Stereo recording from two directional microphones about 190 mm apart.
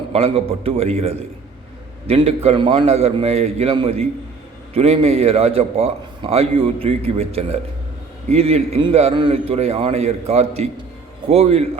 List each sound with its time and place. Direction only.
0.1 s a man's voice: 30° right (ahead or behind)